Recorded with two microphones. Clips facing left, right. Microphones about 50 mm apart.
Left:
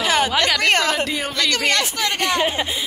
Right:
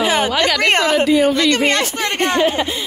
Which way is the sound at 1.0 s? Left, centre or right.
Centre.